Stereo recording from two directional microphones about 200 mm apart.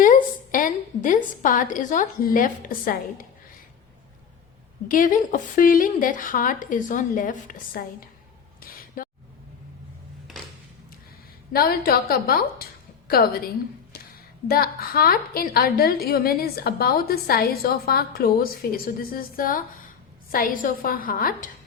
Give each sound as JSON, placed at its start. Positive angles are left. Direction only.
{"t": 0.0, "sound": "a woman's voice", "side_deg": 40}
{"t": 4.9, "sound": "a woman's voice", "side_deg": 40}
{"t": 8.6, "sound": "a sound", "side_deg": 45}
{"t": 11.5, "sound": "a woman's voice", "side_deg": 50}
{"t": 14.4, "sound": "a woman's voice", "side_deg": 50}